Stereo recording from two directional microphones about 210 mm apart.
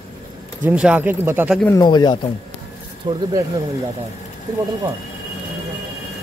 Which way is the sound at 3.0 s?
20° right (ahead or behind).